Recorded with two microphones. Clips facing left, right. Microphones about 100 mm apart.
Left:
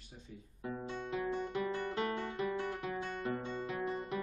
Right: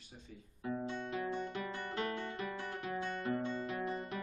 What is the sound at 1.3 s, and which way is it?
Music, 20° left (ahead or behind).